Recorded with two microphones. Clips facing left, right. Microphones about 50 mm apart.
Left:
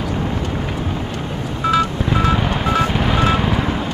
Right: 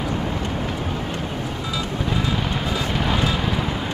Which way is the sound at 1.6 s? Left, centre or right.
Left.